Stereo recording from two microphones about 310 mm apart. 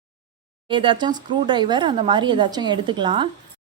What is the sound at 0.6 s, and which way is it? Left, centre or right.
A woman's voice, centre.